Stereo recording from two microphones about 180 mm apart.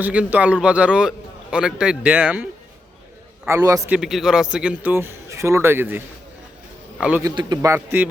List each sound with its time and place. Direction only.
0.0 s a man's voice: 10° right (ahead or behind)
3.9 s a man's voice: centre (ahead or behind)
7.0 s a man's voice: 10° right (ahead or behind)